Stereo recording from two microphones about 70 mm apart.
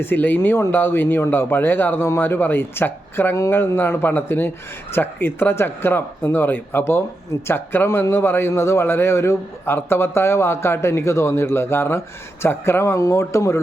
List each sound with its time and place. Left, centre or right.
0.0 s a man's voice: left